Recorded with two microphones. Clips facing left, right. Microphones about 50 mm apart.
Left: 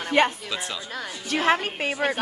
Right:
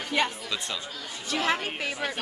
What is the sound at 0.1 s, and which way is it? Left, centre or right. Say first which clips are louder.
Speech: left 6 dB; left.